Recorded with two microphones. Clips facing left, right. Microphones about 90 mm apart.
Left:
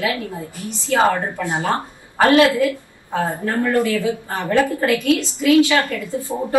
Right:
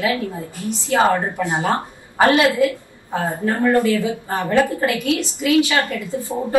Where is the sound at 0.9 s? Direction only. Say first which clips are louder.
Even; 20° right (ahead or behind).